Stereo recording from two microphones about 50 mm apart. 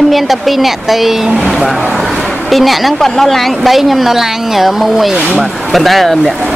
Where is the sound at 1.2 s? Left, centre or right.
Centre.